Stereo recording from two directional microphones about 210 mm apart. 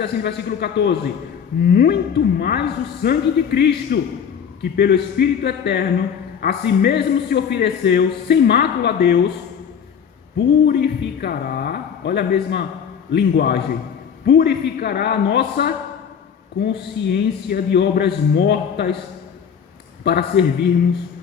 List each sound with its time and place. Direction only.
0.0 s a man's voice: 50° left (ahead or behind)
10.3 s a man's voice: 50° left (ahead or behind)
20.1 s a man's voice: 50° left (ahead or behind)